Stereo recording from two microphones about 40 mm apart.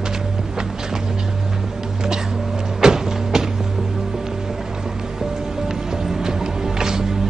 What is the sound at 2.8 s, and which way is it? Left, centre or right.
Music, centre.